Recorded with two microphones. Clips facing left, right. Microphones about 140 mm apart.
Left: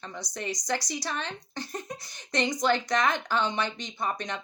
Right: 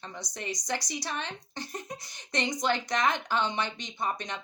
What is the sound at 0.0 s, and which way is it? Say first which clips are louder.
Speech: left 3 dB; 20° right (ahead or behind).